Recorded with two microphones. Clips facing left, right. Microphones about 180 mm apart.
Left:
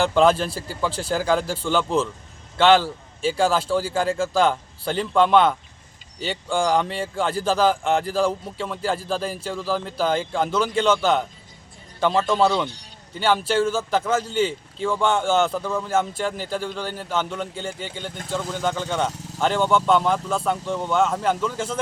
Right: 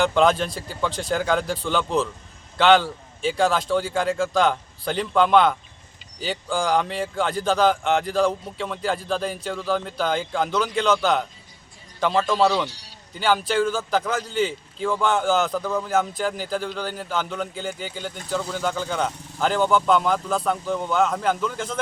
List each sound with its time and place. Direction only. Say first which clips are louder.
0.0 s a man's voice: left 1 dB; centre (ahead or behind)
0.9 s a man's voice: left 1 dB; 30° left (ahead or behind)
1.1 s a man's voice: left 1 dB; centre (ahead or behind)